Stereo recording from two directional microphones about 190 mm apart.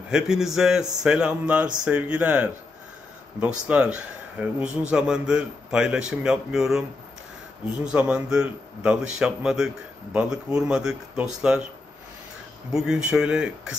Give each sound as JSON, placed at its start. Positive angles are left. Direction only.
{"t": 0.1, "sound": "a man's voice", "side_deg": -5}
{"t": 7.8, "sound": "a man's voice", "side_deg": -5}
{"t": 12.7, "sound": "a man's voice", "side_deg": -5}